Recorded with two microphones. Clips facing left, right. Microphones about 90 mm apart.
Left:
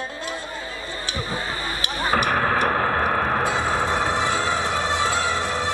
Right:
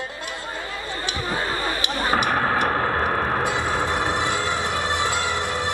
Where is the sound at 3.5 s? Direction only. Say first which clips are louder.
Left 1 dB; 20° left (ahead or behind).